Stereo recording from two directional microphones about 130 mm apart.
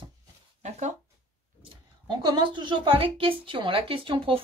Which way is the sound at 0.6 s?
65° right (ahead or behind).